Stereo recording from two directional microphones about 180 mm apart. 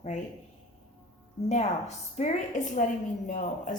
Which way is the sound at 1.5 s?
40° left (ahead or behind).